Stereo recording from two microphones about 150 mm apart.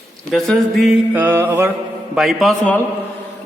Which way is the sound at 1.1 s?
15° right (ahead or behind).